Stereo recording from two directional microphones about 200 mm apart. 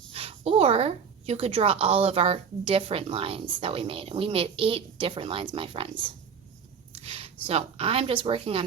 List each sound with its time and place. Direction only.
0.1 s a woman's voice: 30° right (ahead or behind)
6.9 s a sound: 30° right (ahead or behind)
7.4 s a woman's voice: 30° right (ahead or behind)